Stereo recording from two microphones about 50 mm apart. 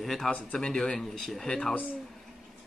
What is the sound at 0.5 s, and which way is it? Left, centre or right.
Speech, centre.